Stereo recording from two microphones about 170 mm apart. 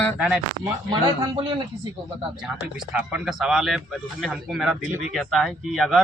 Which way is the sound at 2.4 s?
5° right (ahead or behind).